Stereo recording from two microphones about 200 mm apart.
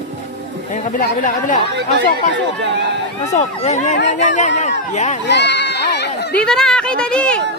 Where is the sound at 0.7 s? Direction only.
40° left (ahead or behind).